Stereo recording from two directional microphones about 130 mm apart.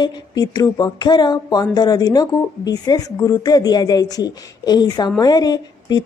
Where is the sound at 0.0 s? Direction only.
30° left (ahead or behind).